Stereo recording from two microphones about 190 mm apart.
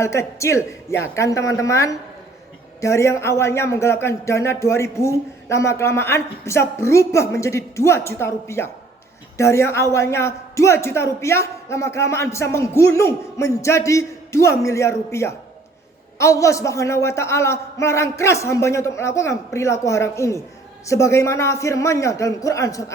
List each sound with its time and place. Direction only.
0.0 s a man's voice: 15° left (ahead or behind)